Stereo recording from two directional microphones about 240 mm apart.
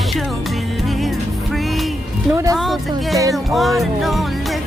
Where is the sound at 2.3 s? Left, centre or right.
Centre.